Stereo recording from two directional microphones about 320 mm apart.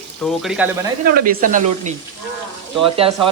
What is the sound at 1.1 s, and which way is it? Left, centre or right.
Speech, right.